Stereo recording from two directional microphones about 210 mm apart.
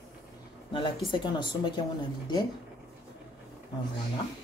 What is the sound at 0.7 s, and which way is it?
Speech, 25° left (ahead or behind).